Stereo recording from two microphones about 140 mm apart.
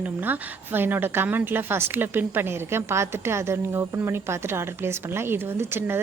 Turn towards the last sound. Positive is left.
turn(degrees=-15)  # may be behind; listen again after turning